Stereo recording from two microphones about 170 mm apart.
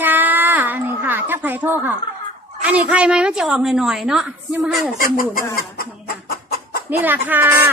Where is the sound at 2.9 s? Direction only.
5° right (ahead or behind).